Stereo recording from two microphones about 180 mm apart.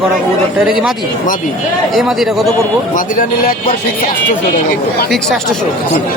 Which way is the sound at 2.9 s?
50° left (ahead or behind).